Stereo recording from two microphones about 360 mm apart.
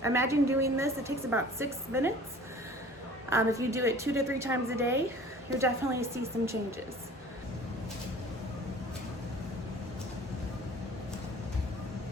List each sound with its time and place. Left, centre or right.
0.0 s a woman's voice: centre
3.2 s a woman's voice: centre